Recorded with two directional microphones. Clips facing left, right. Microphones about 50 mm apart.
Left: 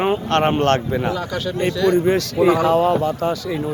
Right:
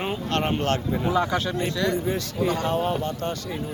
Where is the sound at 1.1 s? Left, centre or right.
Centre.